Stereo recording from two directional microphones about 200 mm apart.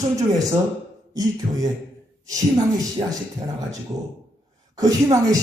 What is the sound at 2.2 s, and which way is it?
Speech, 15° right (ahead or behind).